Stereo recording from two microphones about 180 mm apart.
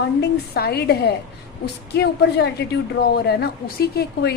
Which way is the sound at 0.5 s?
60° left (ahead or behind).